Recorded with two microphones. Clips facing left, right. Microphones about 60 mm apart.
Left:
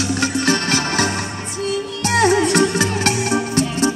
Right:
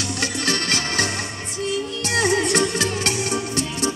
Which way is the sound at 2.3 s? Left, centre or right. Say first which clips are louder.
Left 4 dB; left.